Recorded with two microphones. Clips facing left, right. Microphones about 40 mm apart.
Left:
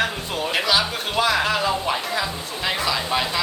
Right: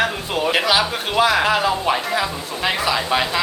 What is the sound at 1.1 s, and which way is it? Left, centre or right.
Speech, centre.